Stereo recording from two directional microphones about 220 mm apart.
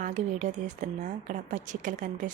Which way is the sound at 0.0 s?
35° right (ahead or behind).